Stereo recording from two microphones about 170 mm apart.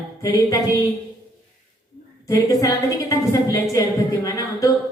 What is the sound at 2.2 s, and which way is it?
A woman's voice, 20° left (ahead or behind).